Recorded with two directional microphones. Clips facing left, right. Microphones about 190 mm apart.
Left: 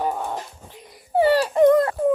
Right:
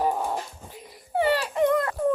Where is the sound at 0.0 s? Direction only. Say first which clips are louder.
Even; 5° right (ahead or behind).